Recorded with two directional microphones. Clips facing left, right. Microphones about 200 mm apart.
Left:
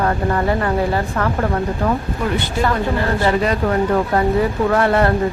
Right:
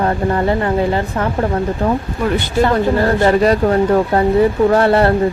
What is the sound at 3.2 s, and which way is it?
Speech, 40° right (ahead or behind).